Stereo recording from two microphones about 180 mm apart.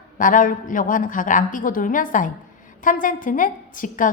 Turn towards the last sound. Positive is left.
turn(degrees=45)  # may be behind; listen again after turning